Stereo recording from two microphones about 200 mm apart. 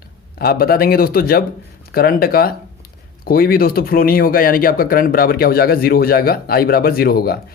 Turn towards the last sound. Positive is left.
turn(degrees=50)  # may be behind; listen again after turning